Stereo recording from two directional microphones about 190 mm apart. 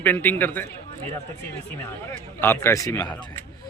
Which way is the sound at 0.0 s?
10° left (ahead or behind).